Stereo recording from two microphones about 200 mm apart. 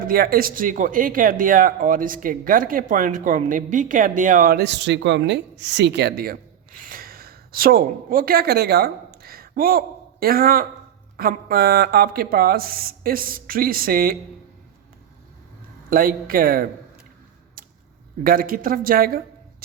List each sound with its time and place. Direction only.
0.1 s a woman's voice: 50° right (ahead or behind)
9.2 s a sound: 50° right (ahead or behind)
11.2 s speech: 45° right (ahead or behind)
15.9 s speech: 45° right (ahead or behind)
18.2 s a man's voice: 45° right (ahead or behind)